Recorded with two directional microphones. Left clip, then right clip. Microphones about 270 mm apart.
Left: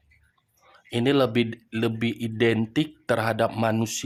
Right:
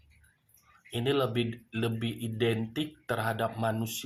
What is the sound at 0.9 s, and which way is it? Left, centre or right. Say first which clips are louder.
Speech: left 7 dB; left.